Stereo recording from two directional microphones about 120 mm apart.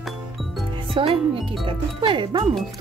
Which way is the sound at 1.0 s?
45° right (ahead or behind).